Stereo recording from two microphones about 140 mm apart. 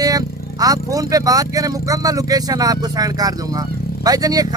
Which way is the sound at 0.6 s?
25° right (ahead or behind).